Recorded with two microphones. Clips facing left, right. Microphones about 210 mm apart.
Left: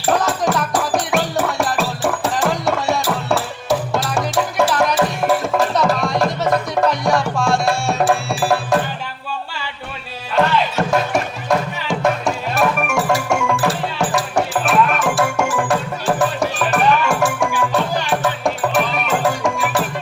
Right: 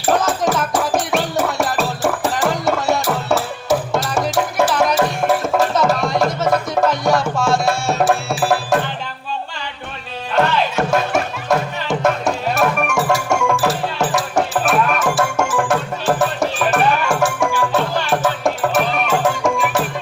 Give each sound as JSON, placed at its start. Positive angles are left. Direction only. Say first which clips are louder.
{"t": 0.1, "sound": "music", "louder": "right 1 dB", "side_deg": 0}
{"t": 10.3, "sound": "music", "louder": "even", "side_deg": 0}